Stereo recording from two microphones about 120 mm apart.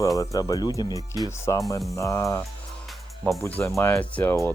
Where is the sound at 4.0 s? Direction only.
15° left (ahead or behind).